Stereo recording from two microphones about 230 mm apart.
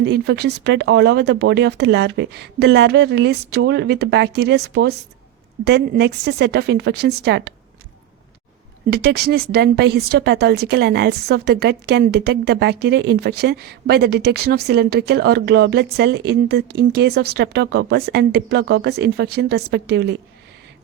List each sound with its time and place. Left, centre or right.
0.0 s a woman's voice: right
8.9 s a woman's voice: right